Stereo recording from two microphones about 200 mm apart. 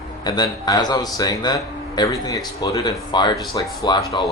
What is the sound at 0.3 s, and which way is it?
Speech, 20° left (ahead or behind).